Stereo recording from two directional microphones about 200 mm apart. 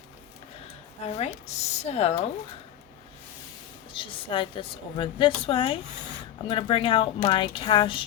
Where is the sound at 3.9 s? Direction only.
25° left (ahead or behind).